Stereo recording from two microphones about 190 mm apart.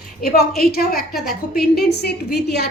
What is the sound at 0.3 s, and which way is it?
A woman's voice, 55° left (ahead or behind).